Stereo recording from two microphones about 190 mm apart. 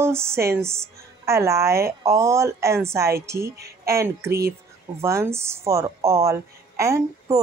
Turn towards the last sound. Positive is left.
turn(degrees=-15)  # may be behind; listen again after turning